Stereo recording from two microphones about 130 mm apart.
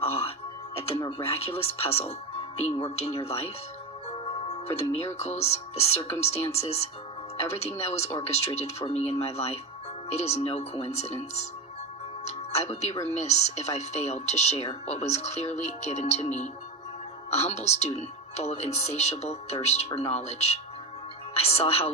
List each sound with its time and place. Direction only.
0.0 s music: 50° left (ahead or behind)
0.8 s music: 25° left (ahead or behind)
1.2 s speech: 50° left (ahead or behind)
2.0 s music: 55° left (ahead or behind)
2.8 s speech: 50° left (ahead or behind)
12.2 s music: 55° left (ahead or behind)
13.1 s speech: 60° left (ahead or behind)
17.3 s speech: 55° left (ahead or behind)